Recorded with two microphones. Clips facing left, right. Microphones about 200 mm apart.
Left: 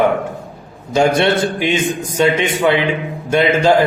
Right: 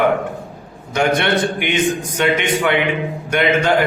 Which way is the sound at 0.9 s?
25° left (ahead or behind).